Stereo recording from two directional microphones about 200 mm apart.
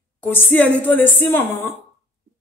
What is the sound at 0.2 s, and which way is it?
Speech, 10° left (ahead or behind).